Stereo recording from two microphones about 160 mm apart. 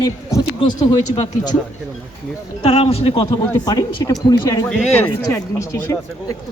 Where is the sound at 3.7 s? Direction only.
25° left (ahead or behind).